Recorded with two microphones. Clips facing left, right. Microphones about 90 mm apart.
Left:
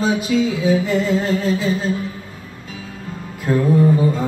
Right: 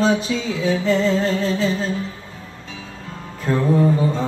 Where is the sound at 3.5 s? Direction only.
10° left (ahead or behind).